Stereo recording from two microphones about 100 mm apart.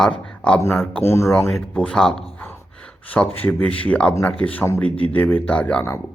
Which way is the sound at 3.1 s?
15° left (ahead or behind).